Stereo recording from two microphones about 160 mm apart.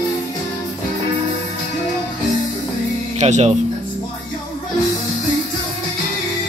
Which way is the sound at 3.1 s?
45° right (ahead or behind).